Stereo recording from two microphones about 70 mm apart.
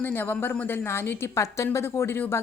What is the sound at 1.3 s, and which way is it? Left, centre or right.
A woman's voice, left.